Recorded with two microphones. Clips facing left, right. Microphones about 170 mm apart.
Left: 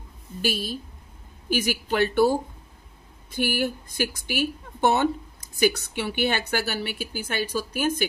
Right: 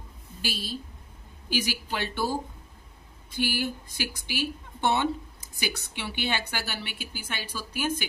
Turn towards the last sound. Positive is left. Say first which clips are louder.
# left 7 dB
turn(degrees=45)  # may be behind; listen again after turning